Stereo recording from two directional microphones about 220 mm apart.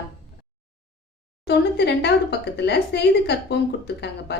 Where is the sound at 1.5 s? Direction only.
50° left (ahead or behind).